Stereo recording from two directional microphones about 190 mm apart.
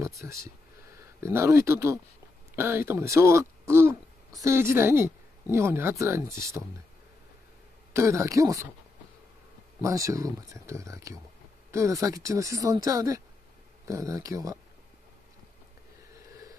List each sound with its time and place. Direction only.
0.0 s speech: 15° right (ahead or behind)
7.9 s speech: 15° right (ahead or behind)
9.8 s speech: 15° right (ahead or behind)